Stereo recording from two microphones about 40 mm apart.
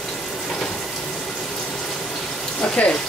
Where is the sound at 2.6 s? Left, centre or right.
Left.